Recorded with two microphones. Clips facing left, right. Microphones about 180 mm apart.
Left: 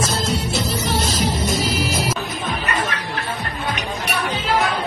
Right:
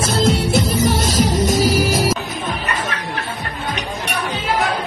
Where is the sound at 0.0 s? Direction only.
55° right (ahead or behind).